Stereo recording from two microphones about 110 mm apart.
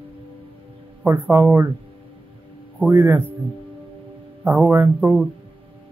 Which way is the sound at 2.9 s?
25° right (ahead or behind).